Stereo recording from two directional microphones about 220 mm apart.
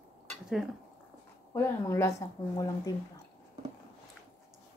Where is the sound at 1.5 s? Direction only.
10° left (ahead or behind).